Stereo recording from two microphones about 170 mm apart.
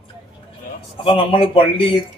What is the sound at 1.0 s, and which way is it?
Speech, 30° left (ahead or behind).